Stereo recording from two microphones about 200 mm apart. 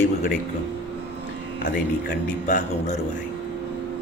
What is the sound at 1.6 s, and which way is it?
Speech, 40° left (ahead or behind).